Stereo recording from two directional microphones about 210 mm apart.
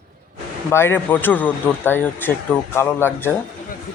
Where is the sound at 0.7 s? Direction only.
10° left (ahead or behind).